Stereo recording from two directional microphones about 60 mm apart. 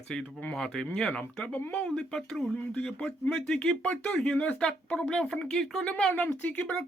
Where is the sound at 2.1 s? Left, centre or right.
Centre.